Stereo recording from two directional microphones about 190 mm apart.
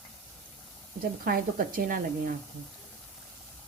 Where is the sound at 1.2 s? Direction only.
50° right (ahead or behind).